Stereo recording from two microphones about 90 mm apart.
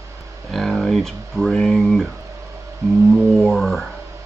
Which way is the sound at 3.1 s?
Centre (ahead or behind).